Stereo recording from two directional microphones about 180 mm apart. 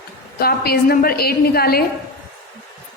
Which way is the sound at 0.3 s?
60° left (ahead or behind).